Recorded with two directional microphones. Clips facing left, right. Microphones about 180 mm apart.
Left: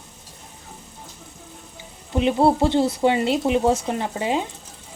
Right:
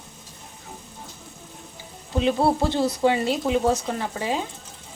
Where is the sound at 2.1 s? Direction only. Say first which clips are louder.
Left 3 dB; 20° left (ahead or behind).